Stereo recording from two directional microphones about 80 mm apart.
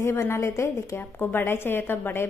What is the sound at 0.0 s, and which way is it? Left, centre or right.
A woman's voice, left.